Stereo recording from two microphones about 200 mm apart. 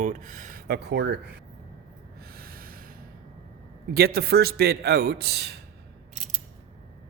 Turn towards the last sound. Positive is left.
turn(degrees=-55)  # may be behind; listen again after turning